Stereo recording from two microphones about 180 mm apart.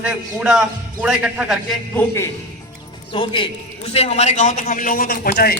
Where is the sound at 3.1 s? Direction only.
30° left (ahead or behind).